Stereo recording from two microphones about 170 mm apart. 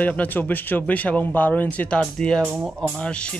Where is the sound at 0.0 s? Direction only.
10° left (ahead or behind).